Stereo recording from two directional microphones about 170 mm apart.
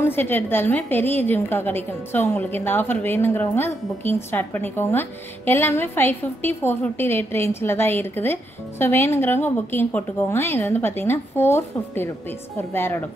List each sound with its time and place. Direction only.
0.0 s a woman's voice: 10° left (ahead or behind)